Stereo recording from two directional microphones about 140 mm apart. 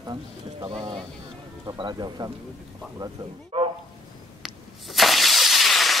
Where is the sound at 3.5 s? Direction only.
40° right (ahead or behind).